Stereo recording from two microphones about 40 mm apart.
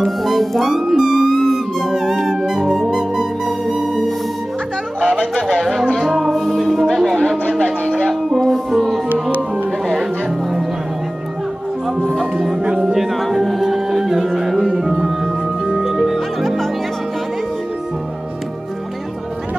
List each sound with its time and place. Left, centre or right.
0.0 s music: centre
5.0 s music: right
5.3 s music: centre
6.3 s music: centre
8.1 s music: centre
12.1 s music: centre